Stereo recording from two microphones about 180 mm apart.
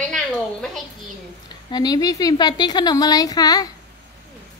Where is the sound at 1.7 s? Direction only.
20° left (ahead or behind).